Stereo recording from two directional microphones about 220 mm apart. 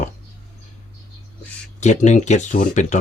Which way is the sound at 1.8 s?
30° left (ahead or behind).